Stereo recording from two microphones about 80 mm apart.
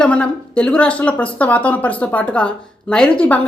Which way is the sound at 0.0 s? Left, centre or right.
Centre.